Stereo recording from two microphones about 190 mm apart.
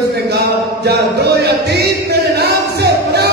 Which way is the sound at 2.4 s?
60° right (ahead or behind).